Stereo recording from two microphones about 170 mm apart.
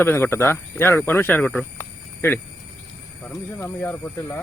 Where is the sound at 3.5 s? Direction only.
10° left (ahead or behind).